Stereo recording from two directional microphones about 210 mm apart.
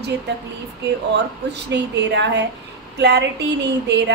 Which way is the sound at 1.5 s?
55° right (ahead or behind).